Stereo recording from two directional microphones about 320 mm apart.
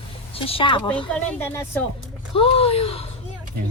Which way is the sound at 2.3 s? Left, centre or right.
Centre.